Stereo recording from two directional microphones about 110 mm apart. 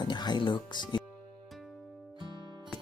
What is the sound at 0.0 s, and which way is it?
Speech, 40° left (ahead or behind).